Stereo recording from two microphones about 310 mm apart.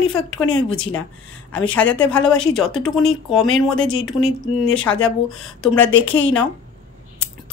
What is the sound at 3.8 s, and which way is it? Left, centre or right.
Speech, left.